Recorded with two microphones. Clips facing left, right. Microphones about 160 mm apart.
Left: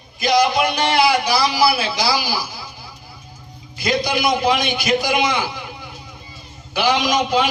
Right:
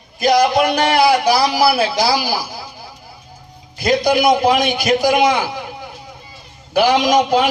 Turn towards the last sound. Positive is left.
turn(degrees=-50)  # may be behind; listen again after turning